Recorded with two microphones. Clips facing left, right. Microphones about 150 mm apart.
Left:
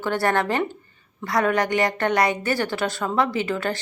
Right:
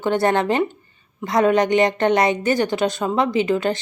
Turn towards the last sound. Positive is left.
turn(degrees=-20)  # may be behind; listen again after turning